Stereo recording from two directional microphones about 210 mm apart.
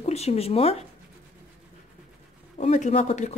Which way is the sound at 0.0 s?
30° left (ahead or behind).